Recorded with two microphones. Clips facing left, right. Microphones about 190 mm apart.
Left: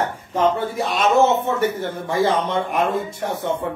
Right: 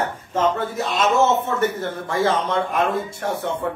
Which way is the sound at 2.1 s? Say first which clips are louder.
Left 1 dB; 15° left (ahead or behind).